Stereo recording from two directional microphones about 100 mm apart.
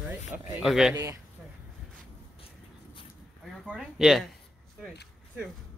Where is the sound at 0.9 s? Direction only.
30° right (ahead or behind).